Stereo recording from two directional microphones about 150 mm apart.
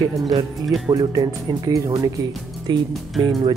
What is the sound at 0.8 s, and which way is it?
Speech, 25° right (ahead or behind).